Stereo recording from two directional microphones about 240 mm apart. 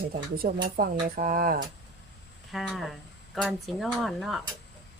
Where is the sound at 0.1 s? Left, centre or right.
Right.